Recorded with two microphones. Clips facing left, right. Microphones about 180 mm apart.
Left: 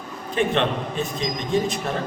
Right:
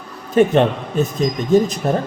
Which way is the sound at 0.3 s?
45° right (ahead or behind).